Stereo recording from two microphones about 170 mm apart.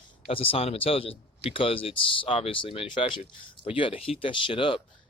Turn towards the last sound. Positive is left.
turn(degrees=30)  # may be behind; listen again after turning